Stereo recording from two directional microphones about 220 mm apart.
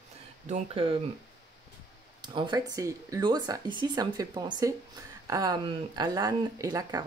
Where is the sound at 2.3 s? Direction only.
20° right (ahead or behind).